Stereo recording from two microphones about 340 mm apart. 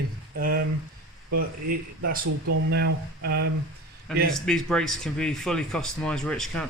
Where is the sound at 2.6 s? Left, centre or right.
Right.